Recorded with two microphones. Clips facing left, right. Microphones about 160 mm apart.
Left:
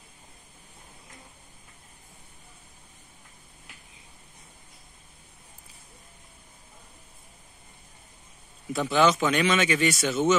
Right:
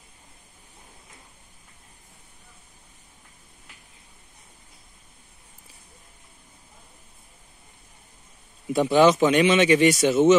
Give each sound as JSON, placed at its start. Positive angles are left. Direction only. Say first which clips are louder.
{"t": 8.7, "sound": "speech", "louder": "right 5 dB", "side_deg": -30}